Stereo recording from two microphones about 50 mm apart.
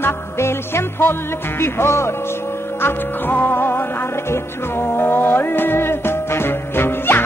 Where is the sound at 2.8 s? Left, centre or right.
Left.